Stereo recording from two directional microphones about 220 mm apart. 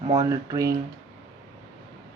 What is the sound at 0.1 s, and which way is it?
Speech, 15° right (ahead or behind).